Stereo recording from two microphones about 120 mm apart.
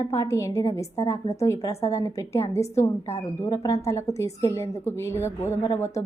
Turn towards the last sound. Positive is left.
turn(degrees=25)  # may be behind; listen again after turning